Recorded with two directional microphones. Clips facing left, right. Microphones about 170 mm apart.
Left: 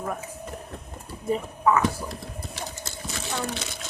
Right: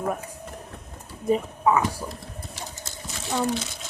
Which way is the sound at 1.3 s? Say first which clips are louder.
Right 2 dB; 15° right (ahead or behind).